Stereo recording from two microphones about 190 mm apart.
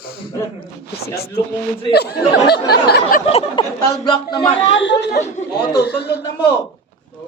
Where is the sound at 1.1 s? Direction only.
55° left (ahead or behind).